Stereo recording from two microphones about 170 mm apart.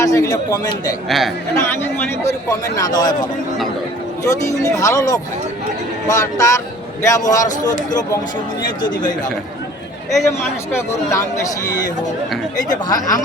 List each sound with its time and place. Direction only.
0.0 s speech: 20° left (ahead or behind)
1.0 s speech: centre (ahead or behind)
1.5 s a man's voice: 15° left (ahead or behind)
10.7 s a man's voice: 15° left (ahead or behind)
12.6 s speech: 25° left (ahead or behind)